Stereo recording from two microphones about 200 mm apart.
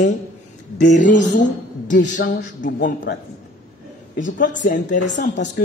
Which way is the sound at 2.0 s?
60° left (ahead or behind).